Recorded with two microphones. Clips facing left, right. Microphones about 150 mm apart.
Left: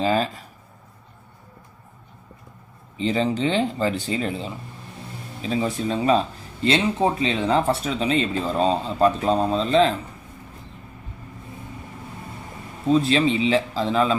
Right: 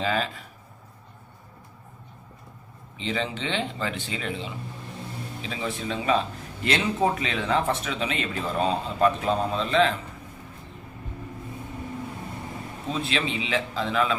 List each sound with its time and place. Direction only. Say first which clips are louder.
0.0 s speech: left 5 dB; 35° left (ahead or behind)
3.0 s speech: left 8 dB; 40° left (ahead or behind)
6.7 s speech: left 4 dB; 25° left (ahead or behind)
12.9 s speech: left 10 dB; 35° left (ahead or behind)